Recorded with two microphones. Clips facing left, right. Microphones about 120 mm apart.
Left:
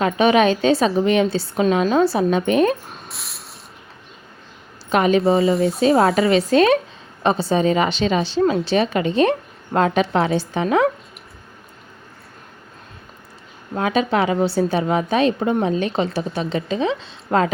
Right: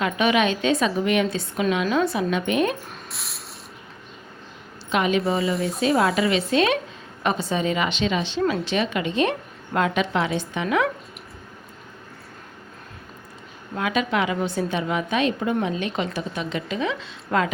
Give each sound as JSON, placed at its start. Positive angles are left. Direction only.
{"t": 0.0, "sound": "a woman's voice", "side_deg": 35}
{"t": 3.1, "sound": "spray", "side_deg": 0}
{"t": 4.9, "sound": "a woman's voice", "side_deg": 40}
{"t": 5.2, "sound": "a woman's voice", "side_deg": 30}
{"t": 13.7, "sound": "a woman's voice", "side_deg": 35}